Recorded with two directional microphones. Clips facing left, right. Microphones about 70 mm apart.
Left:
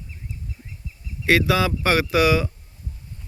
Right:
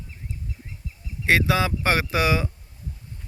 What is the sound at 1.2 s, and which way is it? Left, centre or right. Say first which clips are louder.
Speech: left 2 dB; right.